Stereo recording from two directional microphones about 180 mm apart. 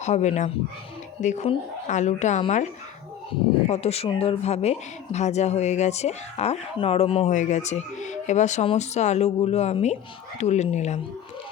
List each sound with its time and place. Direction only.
0.0 s speech: 40° left (ahead or behind)
3.7 s speech: 35° left (ahead or behind)